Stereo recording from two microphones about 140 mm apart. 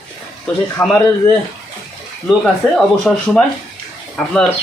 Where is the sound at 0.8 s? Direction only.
Centre (ahead or behind).